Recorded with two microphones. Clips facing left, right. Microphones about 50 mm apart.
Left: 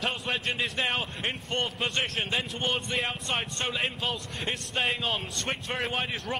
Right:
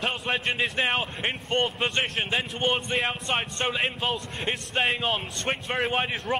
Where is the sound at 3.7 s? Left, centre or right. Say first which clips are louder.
Right 2 dB; centre.